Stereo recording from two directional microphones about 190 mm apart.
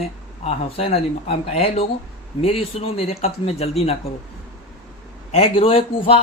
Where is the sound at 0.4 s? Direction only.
35° left (ahead or behind).